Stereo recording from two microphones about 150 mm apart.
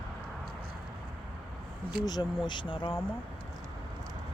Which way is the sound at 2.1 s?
30° left (ahead or behind).